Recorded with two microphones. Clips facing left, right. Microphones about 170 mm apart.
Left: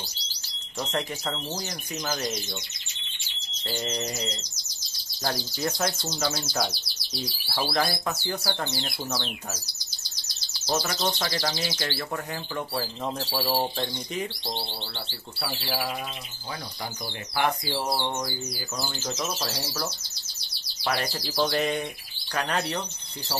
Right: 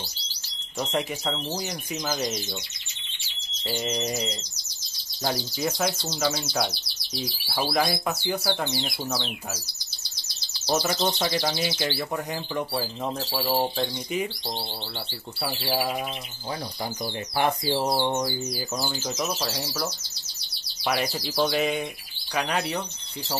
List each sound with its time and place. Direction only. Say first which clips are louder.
0.7 s speech: right 2 dB; 10° right (ahead or behind)
3.6 s speech: right 3 dB; 10° right (ahead or behind)
5.9 s speech: right 2 dB; 5° left (ahead or behind)
7.5 s speech: right 2 dB; 10° right (ahead or behind)
10.7 s speech: right 3 dB; 15° right (ahead or behind)
13.2 s speech: right 2 dB; centre (ahead or behind)
15.3 s speech: right 4 dB; 20° right (ahead or behind)
17.4 s speech: right 3 dB; 25° right (ahead or behind)
19.4 s speech: right 2 dB; centre (ahead or behind)
20.8 s speech: right 2 dB; 10° right (ahead or behind)